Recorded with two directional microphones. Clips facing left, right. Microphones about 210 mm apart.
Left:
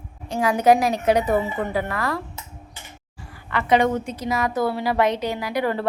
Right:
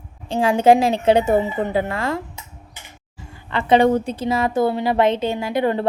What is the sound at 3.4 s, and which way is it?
A woman's voice, 25° right (ahead or behind).